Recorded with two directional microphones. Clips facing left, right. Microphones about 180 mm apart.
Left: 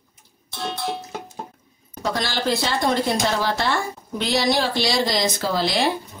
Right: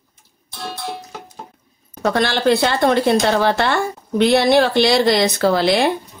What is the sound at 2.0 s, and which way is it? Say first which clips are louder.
Speech: right 7 dB; 60° right (ahead or behind).